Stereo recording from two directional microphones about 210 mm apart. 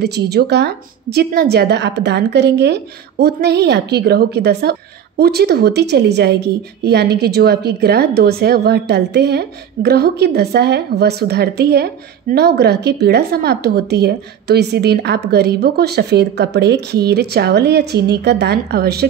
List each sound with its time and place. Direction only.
0.0 s a woman's voice: 50° right (ahead or behind)